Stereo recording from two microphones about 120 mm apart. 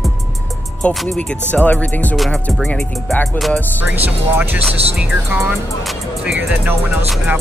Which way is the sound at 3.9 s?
15° right (ahead or behind).